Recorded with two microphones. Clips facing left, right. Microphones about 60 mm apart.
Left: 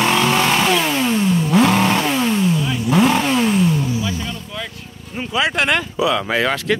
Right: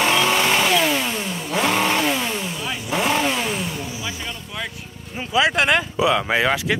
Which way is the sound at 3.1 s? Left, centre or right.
Centre.